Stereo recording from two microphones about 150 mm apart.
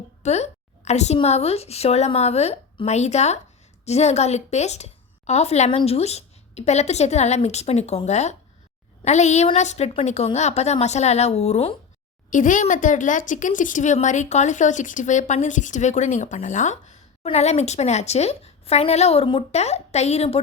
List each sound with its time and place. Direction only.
0.2 s a woman's voice: 45° left (ahead or behind)
12.3 s a woman's voice: 60° left (ahead or behind); by 20.4 s 45° left (ahead or behind)